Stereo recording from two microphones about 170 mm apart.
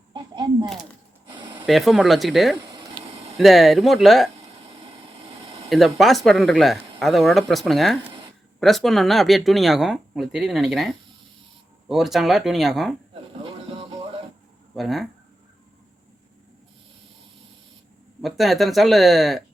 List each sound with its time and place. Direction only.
0.6 s speech: centre (ahead or behind)
1.4 s a sound: 25° right (ahead or behind)
1.6 s speech: centre (ahead or behind)
2.6 s a sound: 25° right (ahead or behind)
3.3 s speech: centre (ahead or behind)
5.6 s speech: centre (ahead or behind)
13.4 s music: 30° right (ahead or behind)
14.8 s speech: centre (ahead or behind)
18.2 s speech: centre (ahead or behind)